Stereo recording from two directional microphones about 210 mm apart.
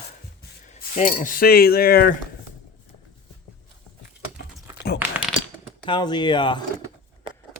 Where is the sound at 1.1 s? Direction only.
40° left (ahead or behind).